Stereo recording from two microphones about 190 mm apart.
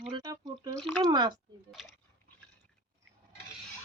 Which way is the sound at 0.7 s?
5° left (ahead or behind).